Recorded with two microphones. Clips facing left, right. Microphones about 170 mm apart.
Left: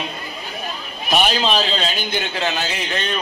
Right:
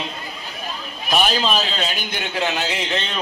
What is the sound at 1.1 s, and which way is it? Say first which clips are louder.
A man's voice: left 1 dB; centre (ahead or behind).